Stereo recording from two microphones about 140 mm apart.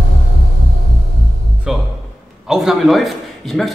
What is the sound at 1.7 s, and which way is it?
Music, 5° right (ahead or behind).